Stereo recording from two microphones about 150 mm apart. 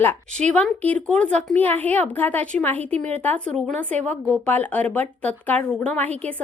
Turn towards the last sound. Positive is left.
turn(degrees=10)  # may be behind; listen again after turning